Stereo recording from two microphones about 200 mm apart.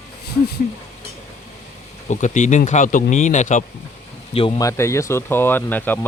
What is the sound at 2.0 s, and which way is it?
Speech, 40° left (ahead or behind).